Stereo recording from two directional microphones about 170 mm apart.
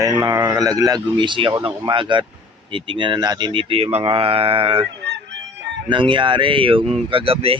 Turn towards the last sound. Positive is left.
turn(degrees=-35)  # may be behind; listen again after turning